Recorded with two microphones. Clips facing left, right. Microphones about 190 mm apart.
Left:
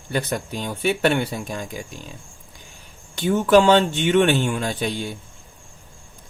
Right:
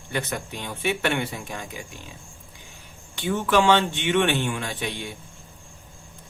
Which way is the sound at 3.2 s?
40° left (ahead or behind).